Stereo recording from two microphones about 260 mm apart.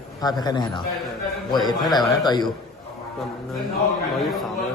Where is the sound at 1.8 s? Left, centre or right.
Centre.